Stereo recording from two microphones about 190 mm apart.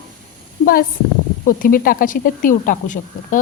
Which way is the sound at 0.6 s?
50° left (ahead or behind).